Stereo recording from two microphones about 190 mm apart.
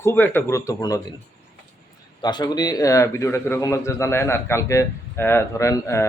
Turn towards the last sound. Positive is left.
turn(degrees=15)  # may be behind; listen again after turning